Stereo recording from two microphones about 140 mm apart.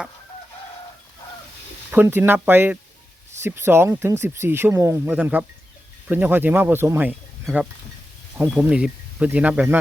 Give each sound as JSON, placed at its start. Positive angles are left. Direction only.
{"t": 1.9, "sound": "speech", "side_deg": -15}
{"t": 5.0, "sound": "speech", "side_deg": -10}
{"t": 8.4, "sound": "speech", "side_deg": -5}